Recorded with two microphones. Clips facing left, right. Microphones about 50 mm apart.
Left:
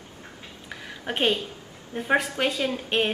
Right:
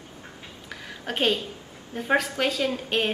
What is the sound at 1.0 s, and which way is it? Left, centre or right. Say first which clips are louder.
A woman's voice: even; centre.